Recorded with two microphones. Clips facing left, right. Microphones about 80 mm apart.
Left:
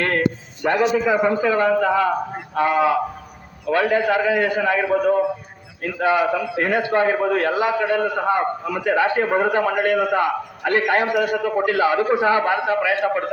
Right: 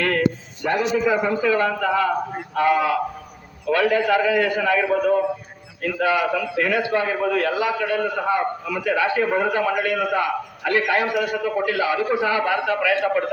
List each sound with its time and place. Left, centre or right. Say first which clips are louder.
0.6 s a man's voice: left 3 dB; left
1.2 s a man's voice: left 2 dB; left